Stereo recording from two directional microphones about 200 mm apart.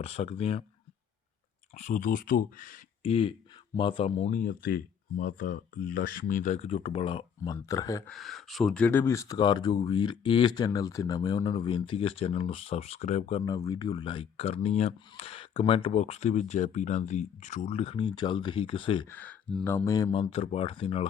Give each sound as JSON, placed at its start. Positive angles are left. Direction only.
{"t": 0.0, "sound": "speech", "side_deg": 30}
{"t": 1.8, "sound": "speech", "side_deg": 40}
{"t": 3.0, "sound": "speech", "side_deg": 30}
{"t": 8.1, "sound": "speech", "side_deg": 0}
{"t": 19.0, "sound": "speech", "side_deg": 10}